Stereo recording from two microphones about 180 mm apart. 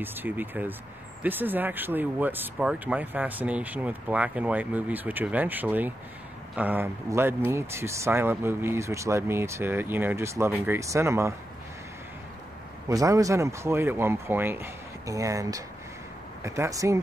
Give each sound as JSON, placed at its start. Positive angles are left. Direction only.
{"t": 0.0, "sound": "speech", "side_deg": -10}
{"t": 12.8, "sound": "speech", "side_deg": -20}